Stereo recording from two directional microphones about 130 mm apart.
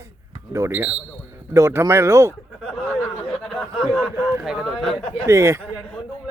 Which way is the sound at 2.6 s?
5° left (ahead or behind).